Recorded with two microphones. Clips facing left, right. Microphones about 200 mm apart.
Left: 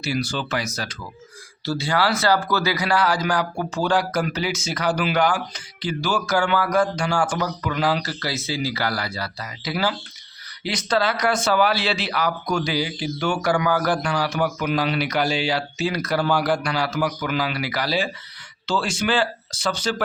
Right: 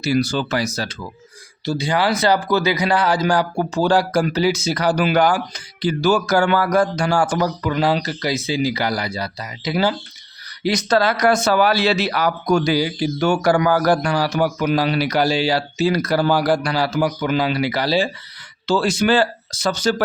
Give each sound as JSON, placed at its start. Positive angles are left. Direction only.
{"t": 0.0, "sound": "speech", "side_deg": -40}
{"t": 1.6, "sound": "speech", "side_deg": -15}
{"t": 10.6, "sound": "speech", "side_deg": -40}
{"t": 18.6, "sound": "speech", "side_deg": -40}